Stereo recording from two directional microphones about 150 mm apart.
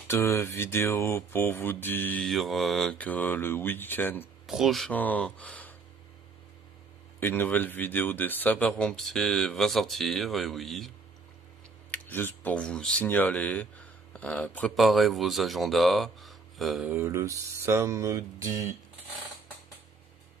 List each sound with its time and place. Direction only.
0.1 s speech: 20° left (ahead or behind)
4.5 s speech: centre (ahead or behind)
7.2 s speech: 15° left (ahead or behind)
11.9 s speech: 10° left (ahead or behind)
14.8 s speech: centre (ahead or behind)
16.9 s speech: 15° right (ahead or behind)